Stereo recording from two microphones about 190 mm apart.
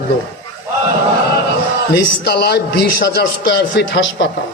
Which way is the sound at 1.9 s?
60° left (ahead or behind).